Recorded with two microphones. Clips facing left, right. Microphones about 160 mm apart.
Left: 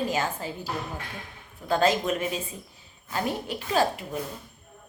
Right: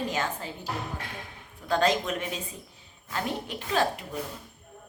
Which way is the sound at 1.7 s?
5° left (ahead or behind).